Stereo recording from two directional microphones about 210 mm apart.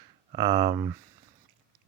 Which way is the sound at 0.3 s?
20° right (ahead or behind).